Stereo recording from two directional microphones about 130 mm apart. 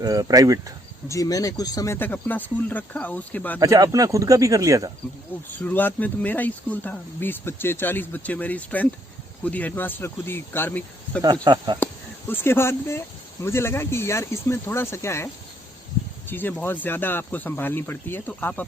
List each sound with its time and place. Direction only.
0.0 s speech: 30° right (ahead or behind)
1.0 s speech: 25° left (ahead or behind)
2.0 s speech: 15° left (ahead or behind)
3.6 s speech: 25° right (ahead or behind)
5.5 s speech: 15° left (ahead or behind)
11.4 s speech: 35° right (ahead or behind)
12.3 s speech: 15° left (ahead or behind)